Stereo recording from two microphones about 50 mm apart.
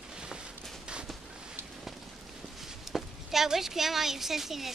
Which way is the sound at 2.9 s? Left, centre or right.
Centre.